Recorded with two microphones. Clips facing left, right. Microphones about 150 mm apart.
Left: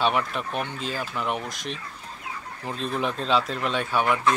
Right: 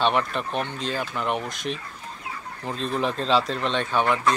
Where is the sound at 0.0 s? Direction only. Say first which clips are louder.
Right 1 dB; 5° left (ahead or behind).